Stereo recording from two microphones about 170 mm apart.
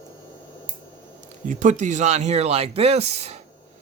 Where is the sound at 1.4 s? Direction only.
45° right (ahead or behind).